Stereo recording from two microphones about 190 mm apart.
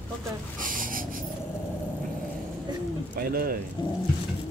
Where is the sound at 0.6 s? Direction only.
45° right (ahead or behind).